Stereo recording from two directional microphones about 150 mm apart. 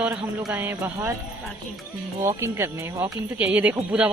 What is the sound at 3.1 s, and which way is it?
Speech, 5° right (ahead or behind).